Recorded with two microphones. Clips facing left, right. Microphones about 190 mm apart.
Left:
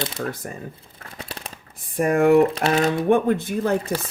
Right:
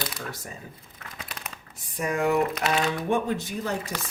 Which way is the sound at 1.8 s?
55° left (ahead or behind).